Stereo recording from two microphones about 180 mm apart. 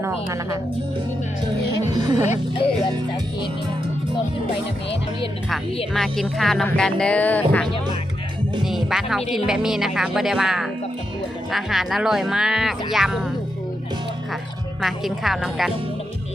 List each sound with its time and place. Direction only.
0.0 s a woman's voice: 15° right (ahead or behind)
1.9 s speech: 20° right (ahead or behind)
5.9 s speech: centre (ahead or behind)
14.8 s speech: centre (ahead or behind)